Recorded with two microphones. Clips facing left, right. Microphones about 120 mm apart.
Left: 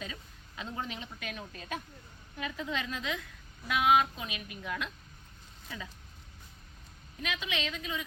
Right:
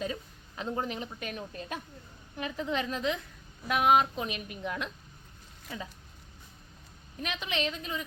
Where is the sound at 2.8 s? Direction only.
35° right (ahead or behind).